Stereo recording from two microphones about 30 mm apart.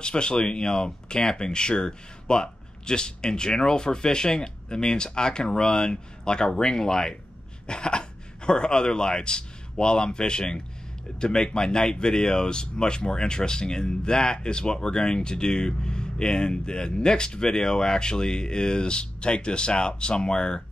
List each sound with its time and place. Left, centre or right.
0.0 s speech: left
7.6 s speech: left